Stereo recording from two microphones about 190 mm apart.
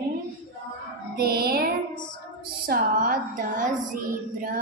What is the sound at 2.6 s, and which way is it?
A woman's voice, 50° right (ahead or behind).